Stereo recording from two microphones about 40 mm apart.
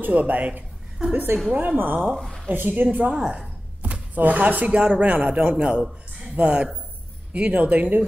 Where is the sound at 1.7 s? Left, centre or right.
Right.